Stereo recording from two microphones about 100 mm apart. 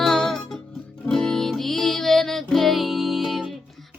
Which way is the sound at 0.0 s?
5° left (ahead or behind).